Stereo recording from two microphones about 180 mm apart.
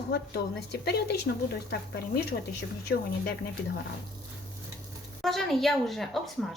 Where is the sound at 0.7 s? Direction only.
65° left (ahead or behind).